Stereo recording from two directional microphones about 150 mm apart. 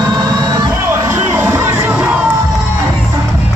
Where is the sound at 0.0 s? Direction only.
25° right (ahead or behind).